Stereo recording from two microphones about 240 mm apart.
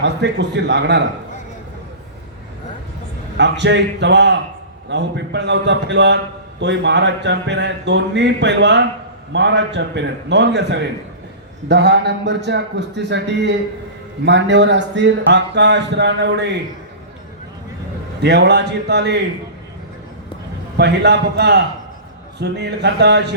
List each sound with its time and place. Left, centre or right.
0.0 s a man's voice: right
3.3 s a man's voice: right
18.2 s a man's voice: right
20.7 s a man's voice: right